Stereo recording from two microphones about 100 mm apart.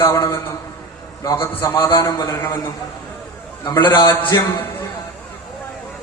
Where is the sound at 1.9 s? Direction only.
40° left (ahead or behind).